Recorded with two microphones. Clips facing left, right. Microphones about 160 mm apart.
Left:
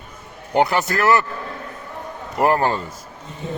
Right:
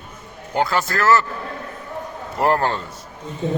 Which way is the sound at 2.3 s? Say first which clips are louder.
Left 1 dB; 10° left (ahead or behind).